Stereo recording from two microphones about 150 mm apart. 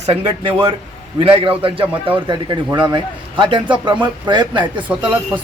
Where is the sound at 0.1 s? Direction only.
35° right (ahead or behind).